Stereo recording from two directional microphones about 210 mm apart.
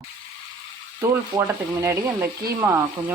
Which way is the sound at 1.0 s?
15° right (ahead or behind).